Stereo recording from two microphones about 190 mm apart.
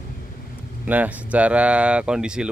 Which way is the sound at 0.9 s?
10° right (ahead or behind).